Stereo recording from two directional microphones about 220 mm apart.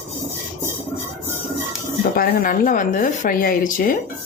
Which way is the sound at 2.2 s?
40° left (ahead or behind).